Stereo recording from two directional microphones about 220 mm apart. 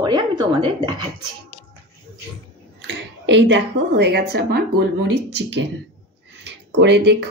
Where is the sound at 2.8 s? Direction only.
55° right (ahead or behind).